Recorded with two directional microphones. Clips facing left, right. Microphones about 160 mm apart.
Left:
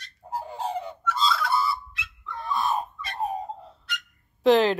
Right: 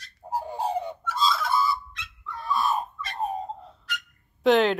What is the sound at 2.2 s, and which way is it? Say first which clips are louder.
Dog: right 1 dB; 20° left (ahead or behind).